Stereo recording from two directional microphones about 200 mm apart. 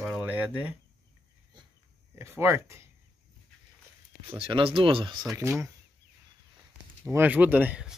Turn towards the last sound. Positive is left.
turn(degrees=-5)  # may be behind; listen again after turning